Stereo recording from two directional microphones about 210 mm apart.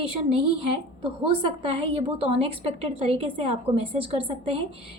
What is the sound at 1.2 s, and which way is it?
A woman's voice, 25° right (ahead or behind).